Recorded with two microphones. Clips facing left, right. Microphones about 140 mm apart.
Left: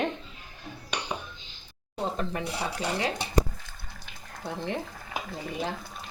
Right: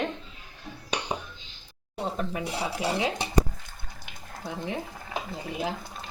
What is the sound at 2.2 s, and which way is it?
Speech, 5° right (ahead or behind).